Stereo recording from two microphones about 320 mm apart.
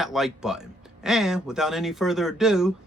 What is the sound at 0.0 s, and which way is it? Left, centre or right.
Speech, centre.